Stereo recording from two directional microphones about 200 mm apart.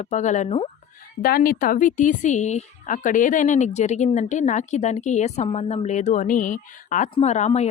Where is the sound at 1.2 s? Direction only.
50° left (ahead or behind).